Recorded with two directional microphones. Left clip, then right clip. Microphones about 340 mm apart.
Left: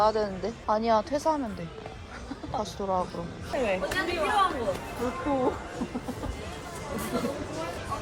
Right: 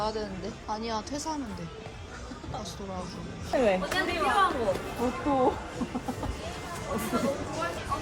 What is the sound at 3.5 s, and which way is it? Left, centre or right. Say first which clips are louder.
Speech: right 3 dB; right.